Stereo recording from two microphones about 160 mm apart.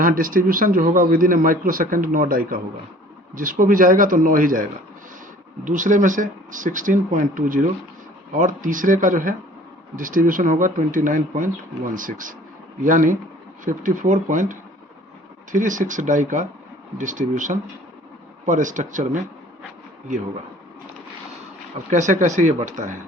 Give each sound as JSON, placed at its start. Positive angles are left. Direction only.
{"t": 0.0, "sound": "a man's voice", "side_deg": -60}
{"t": 21.8, "sound": "speech", "side_deg": -50}